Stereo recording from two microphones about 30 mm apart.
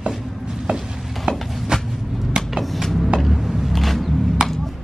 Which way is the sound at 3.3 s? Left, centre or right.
Centre.